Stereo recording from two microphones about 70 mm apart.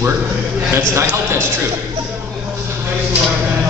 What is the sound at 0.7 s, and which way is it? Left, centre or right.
Speech, right.